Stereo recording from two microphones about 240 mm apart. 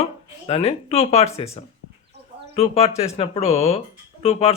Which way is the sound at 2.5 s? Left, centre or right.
Left.